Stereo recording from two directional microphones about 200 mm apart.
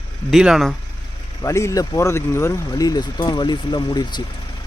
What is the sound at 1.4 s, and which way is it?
Speech, 15° left (ahead or behind).